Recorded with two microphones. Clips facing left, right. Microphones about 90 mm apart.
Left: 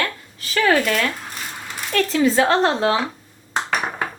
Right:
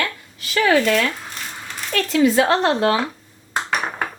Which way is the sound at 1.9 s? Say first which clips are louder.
Right 1 dB; 35° left (ahead or behind).